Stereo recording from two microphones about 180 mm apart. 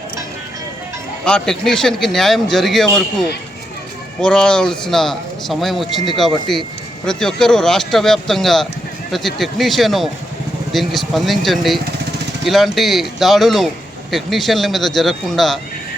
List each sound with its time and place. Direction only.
1.2 s speech: 5° left (ahead or behind)